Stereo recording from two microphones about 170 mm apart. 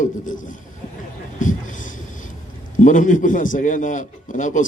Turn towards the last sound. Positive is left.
turn(degrees=50)  # may be behind; listen again after turning